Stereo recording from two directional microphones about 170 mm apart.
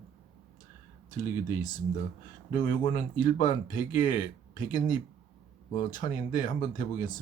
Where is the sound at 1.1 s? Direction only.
50° left (ahead or behind).